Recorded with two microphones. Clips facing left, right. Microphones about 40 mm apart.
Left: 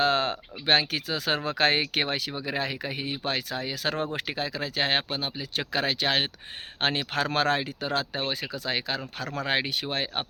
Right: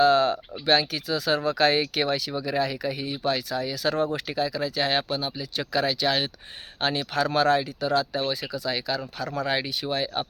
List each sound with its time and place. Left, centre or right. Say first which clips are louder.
0.0 s speech: right 5 dB; left